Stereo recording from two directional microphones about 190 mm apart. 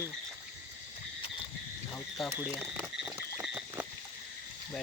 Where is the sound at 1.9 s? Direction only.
Centre (ahead or behind).